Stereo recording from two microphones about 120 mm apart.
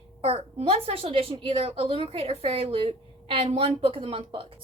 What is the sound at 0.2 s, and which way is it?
A woman's voice, 50° right (ahead or behind).